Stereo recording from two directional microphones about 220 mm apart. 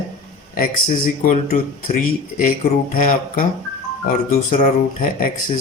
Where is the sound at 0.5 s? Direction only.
40° left (ahead or behind).